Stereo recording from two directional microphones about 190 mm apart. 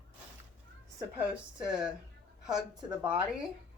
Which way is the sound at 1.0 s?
5° right (ahead or behind).